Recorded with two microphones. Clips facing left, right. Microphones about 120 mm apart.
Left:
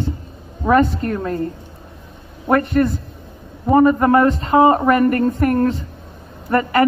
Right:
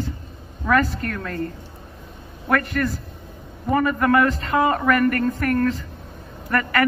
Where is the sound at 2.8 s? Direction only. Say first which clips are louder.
Left 7 dB; 25° left (ahead or behind).